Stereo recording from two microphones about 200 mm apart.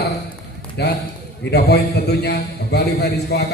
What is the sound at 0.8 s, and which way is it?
A man's voice, 55° left (ahead or behind).